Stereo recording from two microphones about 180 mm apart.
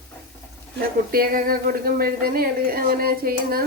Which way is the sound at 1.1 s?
55° right (ahead or behind).